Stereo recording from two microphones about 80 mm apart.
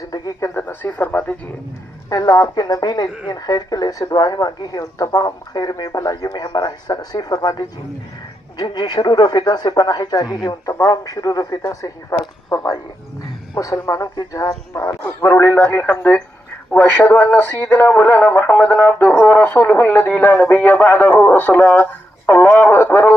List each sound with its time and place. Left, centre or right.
0.1 s a sound: left
0.6 s speech: left
2.0 s speech: left
6.2 s speech: left
8.5 s speech: left
10.7 s speech: left
10.9 s speech: left
13.9 s speech: left
15.5 s speech: left